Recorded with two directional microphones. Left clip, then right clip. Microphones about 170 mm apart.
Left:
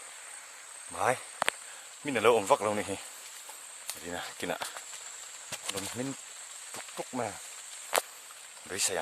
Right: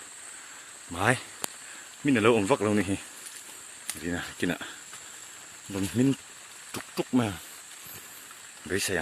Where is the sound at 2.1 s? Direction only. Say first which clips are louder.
Right 2 dB; 20° left (ahead or behind).